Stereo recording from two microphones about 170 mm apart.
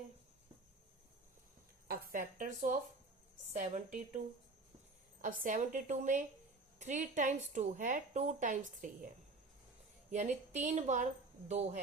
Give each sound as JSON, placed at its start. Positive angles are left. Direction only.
{"t": 1.9, "sound": "a woman's voice", "side_deg": -50}
{"t": 5.2, "sound": "a woman's voice", "side_deg": -50}
{"t": 10.1, "sound": "a woman's voice", "side_deg": -45}